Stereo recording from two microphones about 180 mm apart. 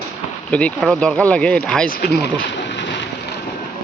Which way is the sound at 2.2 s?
80° left.